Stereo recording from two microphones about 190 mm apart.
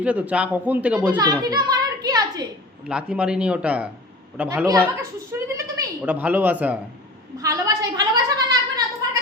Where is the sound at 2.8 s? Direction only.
5° right (ahead or behind).